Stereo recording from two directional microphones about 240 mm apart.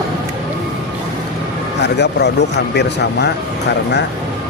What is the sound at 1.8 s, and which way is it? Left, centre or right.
Speech, left.